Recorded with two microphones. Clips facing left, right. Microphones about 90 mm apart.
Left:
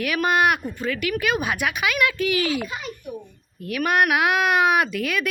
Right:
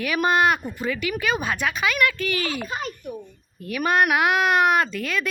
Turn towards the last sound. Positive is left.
turn(degrees=10)  # may be behind; listen again after turning